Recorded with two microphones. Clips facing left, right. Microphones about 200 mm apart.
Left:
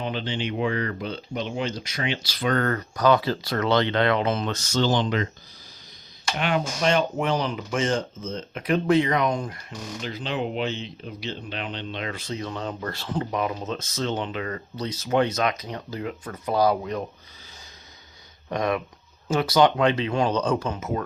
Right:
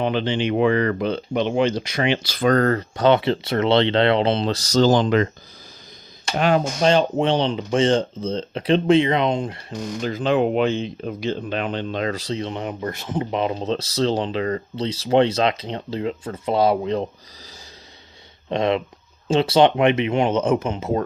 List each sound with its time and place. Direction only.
0.0 s speech: 70° right (ahead or behind); by 0.6 s 55° right (ahead or behind)
0.6 s speech: 80° right; by 5.3 s 55° right (ahead or behind)
6.3 s speech: 40° right (ahead or behind)
10.0 s speech: 50° right (ahead or behind); by 17.1 s 25° right (ahead or behind)
18.4 s speech: 25° right (ahead or behind)